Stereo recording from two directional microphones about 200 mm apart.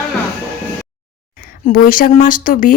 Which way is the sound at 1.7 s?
45° left (ahead or behind).